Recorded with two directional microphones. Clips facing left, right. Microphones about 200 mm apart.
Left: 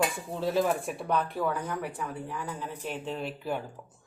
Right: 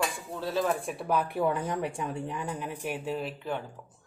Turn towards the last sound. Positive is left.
turn(degrees=5)  # may be behind; listen again after turning